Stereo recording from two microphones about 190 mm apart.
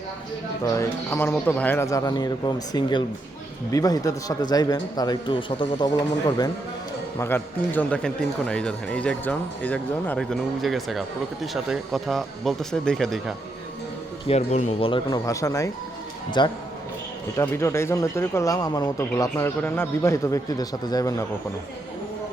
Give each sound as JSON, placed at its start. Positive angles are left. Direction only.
{"t": 0.6, "sound": "a man's voice", "side_deg": 15}
{"t": 14.3, "sound": "a man's voice", "side_deg": 35}